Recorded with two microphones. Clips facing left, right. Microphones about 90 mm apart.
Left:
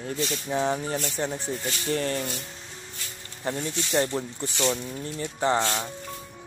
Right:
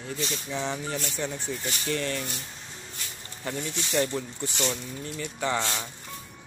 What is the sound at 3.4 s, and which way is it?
Speech, 35° left (ahead or behind).